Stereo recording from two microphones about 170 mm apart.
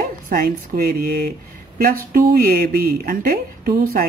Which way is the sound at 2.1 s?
60° right (ahead or behind).